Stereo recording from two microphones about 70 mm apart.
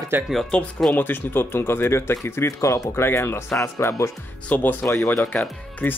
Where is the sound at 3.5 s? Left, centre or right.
Left.